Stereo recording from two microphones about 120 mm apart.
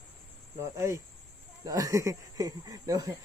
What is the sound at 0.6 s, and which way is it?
Speech, 25° right (ahead or behind).